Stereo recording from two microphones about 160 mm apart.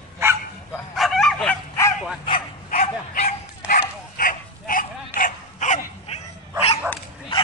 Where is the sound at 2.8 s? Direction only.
50° left (ahead or behind).